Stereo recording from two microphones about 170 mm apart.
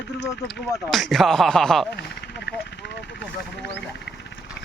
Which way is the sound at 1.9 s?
80° left.